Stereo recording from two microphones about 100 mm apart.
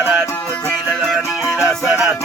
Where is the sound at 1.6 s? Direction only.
Centre (ahead or behind).